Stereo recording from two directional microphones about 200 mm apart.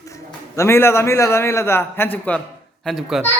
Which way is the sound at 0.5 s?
15° left (ahead or behind).